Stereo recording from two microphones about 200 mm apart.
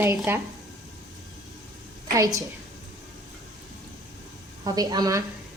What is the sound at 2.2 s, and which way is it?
Speech, 15° right (ahead or behind).